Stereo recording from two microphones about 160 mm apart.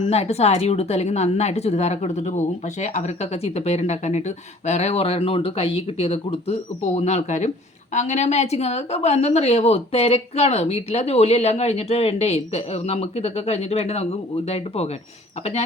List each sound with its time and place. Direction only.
0.0 s a woman's voice: 40° left (ahead or behind)